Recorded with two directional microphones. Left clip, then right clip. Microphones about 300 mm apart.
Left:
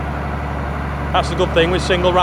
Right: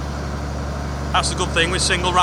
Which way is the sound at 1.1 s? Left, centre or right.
Centre.